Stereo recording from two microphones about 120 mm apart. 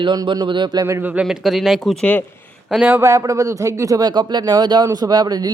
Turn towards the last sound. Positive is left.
turn(degrees=-35)  # may be behind; listen again after turning